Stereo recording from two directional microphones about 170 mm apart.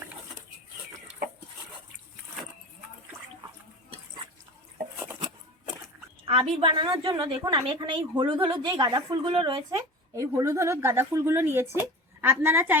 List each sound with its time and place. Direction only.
6.2 s a woman's voice: 30° right (ahead or behind); by 12.8 s 10° right (ahead or behind)